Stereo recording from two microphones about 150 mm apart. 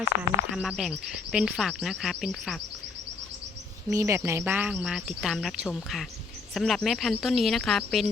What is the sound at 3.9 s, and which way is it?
A woman's voice, 20° right (ahead or behind).